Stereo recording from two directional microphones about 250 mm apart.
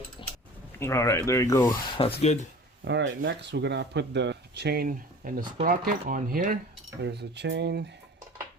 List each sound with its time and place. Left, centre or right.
0.8 s speech: centre; by 2.5 s left
2.8 s speech: right